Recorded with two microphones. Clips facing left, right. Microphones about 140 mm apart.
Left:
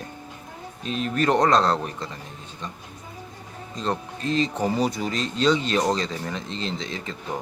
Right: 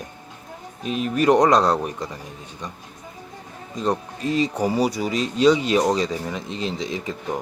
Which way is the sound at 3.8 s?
10° right (ahead or behind).